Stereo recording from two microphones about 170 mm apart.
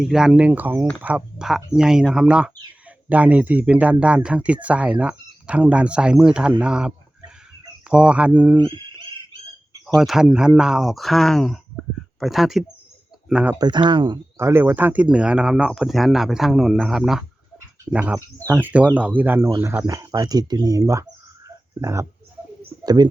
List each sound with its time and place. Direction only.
0.0 s speech: 5° right (ahead or behind)
10.0 s speech: 5° right (ahead or behind)
13.6 s speech: 25° right (ahead or behind)
14.3 s speech: 15° right (ahead or behind)